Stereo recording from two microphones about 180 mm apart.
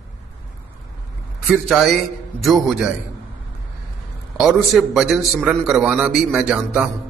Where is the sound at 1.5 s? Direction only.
Centre (ahead or behind).